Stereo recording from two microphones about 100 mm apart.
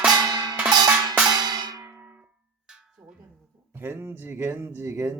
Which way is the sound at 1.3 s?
45° right (ahead or behind).